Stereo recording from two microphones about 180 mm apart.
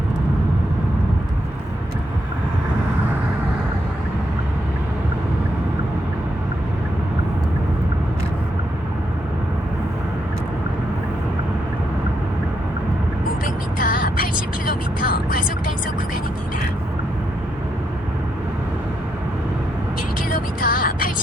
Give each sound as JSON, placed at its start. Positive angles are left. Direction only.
{"t": 13.4, "sound": "music", "side_deg": 50}
{"t": 14.7, "sound": "vehicle", "side_deg": 50}
{"t": 20.3, "sound": "music", "side_deg": 50}